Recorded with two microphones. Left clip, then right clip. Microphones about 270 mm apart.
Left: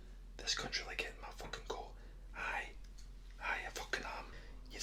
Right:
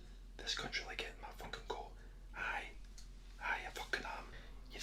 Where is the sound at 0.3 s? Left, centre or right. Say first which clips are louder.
Left 2 dB; centre.